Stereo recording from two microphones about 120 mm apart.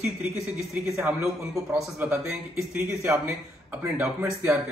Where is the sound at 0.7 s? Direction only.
10° right (ahead or behind).